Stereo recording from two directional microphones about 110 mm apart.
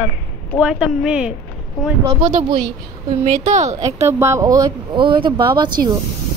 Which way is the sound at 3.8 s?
25° right (ahead or behind).